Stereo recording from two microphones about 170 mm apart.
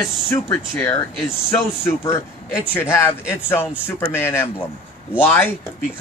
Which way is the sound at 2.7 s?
15° left (ahead or behind).